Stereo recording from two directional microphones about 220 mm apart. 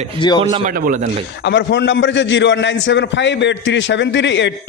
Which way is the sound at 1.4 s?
50° left (ahead or behind).